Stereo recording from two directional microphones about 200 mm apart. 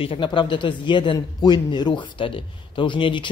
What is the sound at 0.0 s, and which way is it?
Speech, 25° left (ahead or behind).